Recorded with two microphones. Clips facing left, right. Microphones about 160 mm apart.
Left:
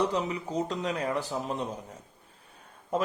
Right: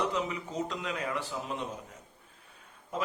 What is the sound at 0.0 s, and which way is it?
Speech, 35° left (ahead or behind).